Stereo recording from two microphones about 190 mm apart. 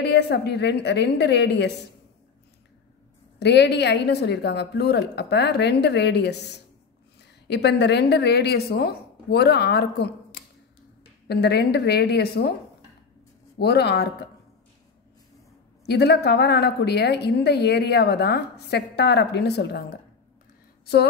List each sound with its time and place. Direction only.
0.0 s a woman's voice: 65° left (ahead or behind)
3.3 s a woman's voice: 65° left (ahead or behind)
13.6 s a woman's voice: 60° left (ahead or behind)
15.8 s a woman's voice: 60° left (ahead or behind)